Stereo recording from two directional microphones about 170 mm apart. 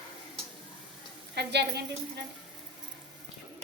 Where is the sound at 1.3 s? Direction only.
80° right.